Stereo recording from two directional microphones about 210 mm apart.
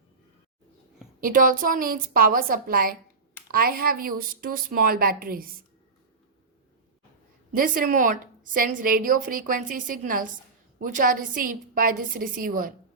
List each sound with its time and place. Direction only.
1.2 s a woman's voice: 40° right (ahead or behind)
7.5 s a woman's voice: 40° right (ahead or behind)